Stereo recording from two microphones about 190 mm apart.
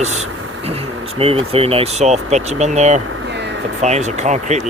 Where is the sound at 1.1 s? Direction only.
30° right (ahead or behind).